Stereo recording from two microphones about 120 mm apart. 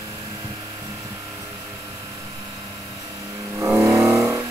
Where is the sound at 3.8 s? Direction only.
20° right (ahead or behind).